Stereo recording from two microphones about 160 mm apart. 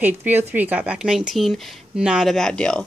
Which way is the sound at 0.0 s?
10° right (ahead or behind).